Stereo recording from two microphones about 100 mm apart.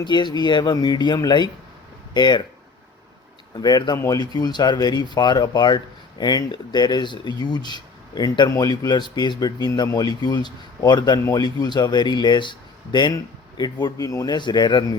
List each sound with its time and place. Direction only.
0.0 s speech: 50° left (ahead or behind)
3.5 s speech: 40° left (ahead or behind)